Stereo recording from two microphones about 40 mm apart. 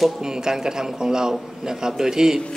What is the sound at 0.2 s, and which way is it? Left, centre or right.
A man's voice, centre.